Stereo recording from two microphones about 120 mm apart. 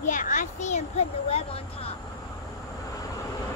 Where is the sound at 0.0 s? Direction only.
90° left; by 1.6 s 60° left (ahead or behind).